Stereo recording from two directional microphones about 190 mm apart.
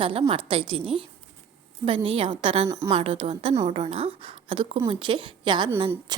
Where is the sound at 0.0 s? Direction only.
30° right (ahead or behind).